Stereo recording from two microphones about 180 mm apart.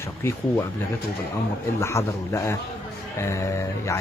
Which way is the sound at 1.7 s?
15° left (ahead or behind).